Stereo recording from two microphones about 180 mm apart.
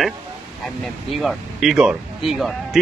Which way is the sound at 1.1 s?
Centre (ahead or behind).